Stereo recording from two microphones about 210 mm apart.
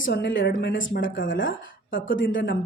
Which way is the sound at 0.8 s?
65° left (ahead or behind).